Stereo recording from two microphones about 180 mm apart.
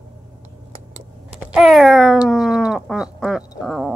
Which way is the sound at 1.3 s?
5° right (ahead or behind).